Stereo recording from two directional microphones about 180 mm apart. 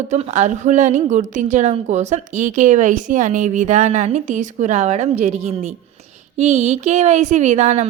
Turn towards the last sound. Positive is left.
turn(degrees=-40)  # may be behind; listen again after turning